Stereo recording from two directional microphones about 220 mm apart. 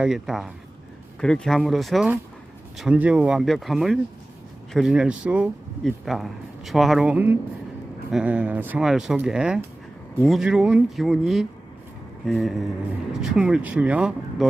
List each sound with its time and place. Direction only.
0.0 s speech: centre (ahead or behind)